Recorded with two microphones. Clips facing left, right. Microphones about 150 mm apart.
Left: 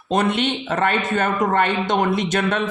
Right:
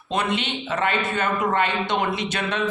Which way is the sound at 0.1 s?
45° left (ahead or behind).